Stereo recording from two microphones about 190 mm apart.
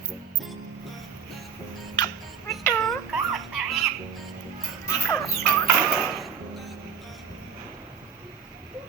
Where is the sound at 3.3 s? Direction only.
Centre (ahead or behind).